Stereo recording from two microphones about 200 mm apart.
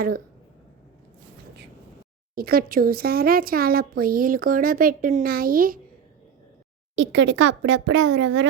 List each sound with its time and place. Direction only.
2.3 s speech: 50° right (ahead or behind)
6.9 s speech: 65° right (ahead or behind)